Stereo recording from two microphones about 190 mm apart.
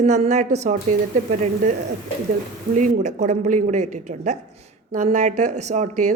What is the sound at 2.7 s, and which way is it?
Speech, 40° right (ahead or behind).